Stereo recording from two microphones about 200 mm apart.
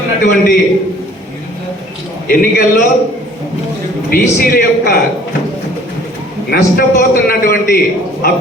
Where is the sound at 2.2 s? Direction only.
45° left (ahead or behind).